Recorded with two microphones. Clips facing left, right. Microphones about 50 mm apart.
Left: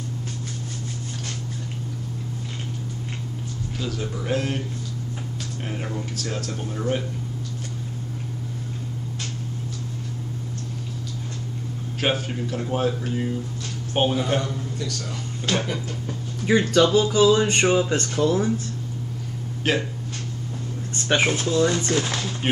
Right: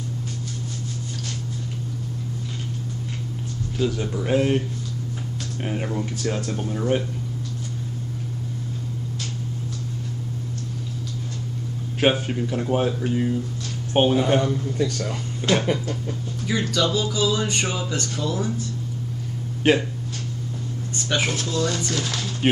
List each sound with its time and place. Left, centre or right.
3.8 s speech: centre
5.9 s speech: centre
12.0 s speech: centre; by 15.0 s right
15.5 s speech: centre
16.4 s speech: left
19.7 s speech: centre
21.1 s speech: left